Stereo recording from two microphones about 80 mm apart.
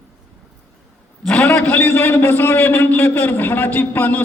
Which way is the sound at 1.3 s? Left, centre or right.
Centre.